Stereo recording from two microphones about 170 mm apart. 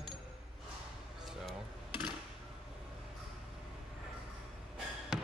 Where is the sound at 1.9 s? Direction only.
25° left (ahead or behind).